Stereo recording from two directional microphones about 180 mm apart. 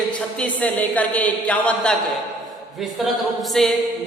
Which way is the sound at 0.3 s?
10° left (ahead or behind).